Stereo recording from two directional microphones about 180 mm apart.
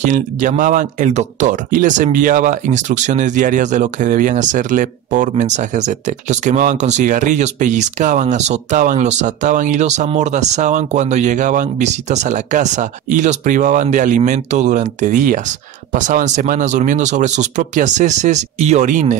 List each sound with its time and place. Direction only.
0.0 s speech: 45° right (ahead or behind)